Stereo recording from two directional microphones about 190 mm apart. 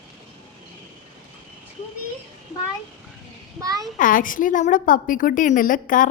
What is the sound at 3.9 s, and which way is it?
A woman's voice, 45° left (ahead or behind).